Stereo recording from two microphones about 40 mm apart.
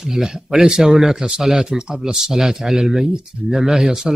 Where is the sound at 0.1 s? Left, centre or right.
Centre.